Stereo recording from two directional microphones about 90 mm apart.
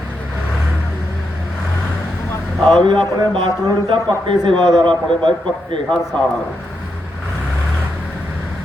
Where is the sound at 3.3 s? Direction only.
75° right (ahead or behind).